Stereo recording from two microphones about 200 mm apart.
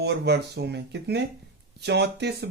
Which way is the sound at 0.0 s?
55° right (ahead or behind).